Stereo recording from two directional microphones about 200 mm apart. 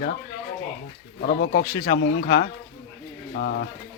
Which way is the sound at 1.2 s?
50° left (ahead or behind).